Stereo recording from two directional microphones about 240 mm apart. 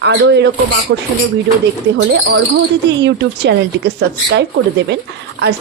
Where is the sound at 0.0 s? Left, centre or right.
Right.